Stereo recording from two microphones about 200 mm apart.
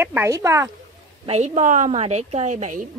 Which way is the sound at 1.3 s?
35° right (ahead or behind).